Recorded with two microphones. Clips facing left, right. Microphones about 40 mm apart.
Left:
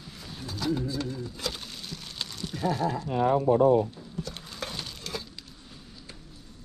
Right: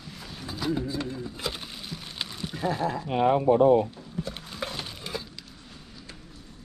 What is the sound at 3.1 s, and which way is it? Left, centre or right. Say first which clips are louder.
Speech: right 2 dB; right.